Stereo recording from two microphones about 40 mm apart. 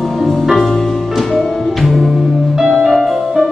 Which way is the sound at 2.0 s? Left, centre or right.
Centre.